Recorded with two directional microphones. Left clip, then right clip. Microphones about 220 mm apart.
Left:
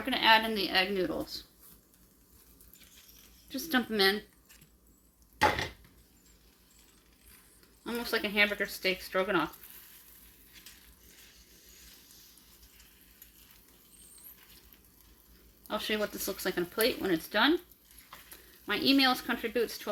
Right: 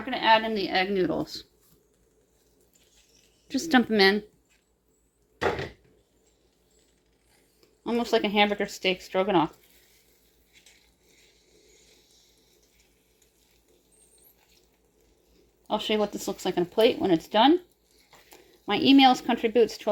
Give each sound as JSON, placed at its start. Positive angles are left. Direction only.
{"t": 0.0, "sound": "speech", "side_deg": 0}
{"t": 3.5, "sound": "a woman's voice", "side_deg": -35}
{"t": 7.9, "sound": "speech", "side_deg": -25}
{"t": 15.6, "sound": "speech", "side_deg": -20}
{"t": 18.6, "sound": "speech", "side_deg": -25}